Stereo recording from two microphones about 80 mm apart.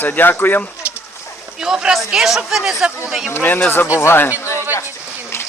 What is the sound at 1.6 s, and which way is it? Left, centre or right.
Speech, centre.